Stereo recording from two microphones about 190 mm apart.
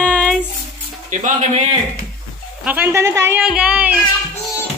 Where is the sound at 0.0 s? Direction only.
5° left (ahead or behind).